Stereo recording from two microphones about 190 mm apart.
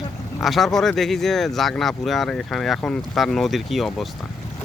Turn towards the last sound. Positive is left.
turn(degrees=0)  # may be behind; listen again after turning